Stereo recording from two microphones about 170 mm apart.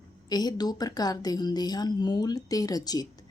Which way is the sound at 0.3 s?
25° left (ahead or behind).